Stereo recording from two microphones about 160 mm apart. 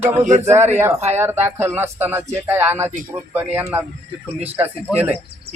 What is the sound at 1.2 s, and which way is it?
Speech, 15° right (ahead or behind).